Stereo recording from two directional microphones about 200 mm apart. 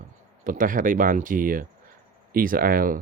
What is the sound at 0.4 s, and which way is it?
Speech, 40° right (ahead or behind).